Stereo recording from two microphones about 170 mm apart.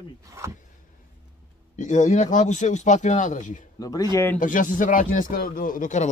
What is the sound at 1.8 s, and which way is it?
Speech, 45° left (ahead or behind).